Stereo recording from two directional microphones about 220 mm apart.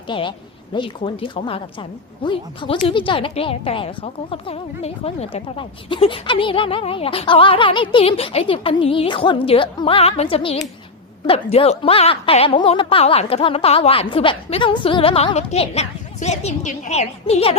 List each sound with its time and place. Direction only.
0.1 s a woman's voice: 20° left (ahead or behind)